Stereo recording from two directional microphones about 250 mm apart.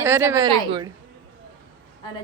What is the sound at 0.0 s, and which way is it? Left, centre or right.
Speech, centre.